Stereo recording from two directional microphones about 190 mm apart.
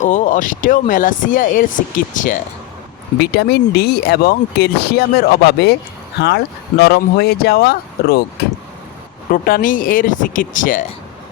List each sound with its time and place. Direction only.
0.0 s speech: 40° left (ahead or behind)
3.2 s speech: 60° left (ahead or behind)
9.3 s speech: 45° left (ahead or behind)